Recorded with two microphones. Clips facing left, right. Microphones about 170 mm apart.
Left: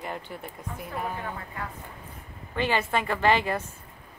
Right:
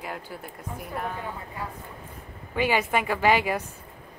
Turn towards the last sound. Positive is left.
turn(degrees=-10)  # may be behind; listen again after turning